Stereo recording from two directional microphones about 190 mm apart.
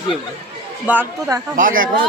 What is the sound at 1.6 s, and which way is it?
Speech, 45° right (ahead or behind).